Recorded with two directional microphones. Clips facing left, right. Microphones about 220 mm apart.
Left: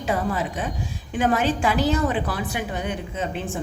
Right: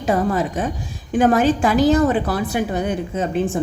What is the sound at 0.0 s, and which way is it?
A woman's voice, 40° right (ahead or behind).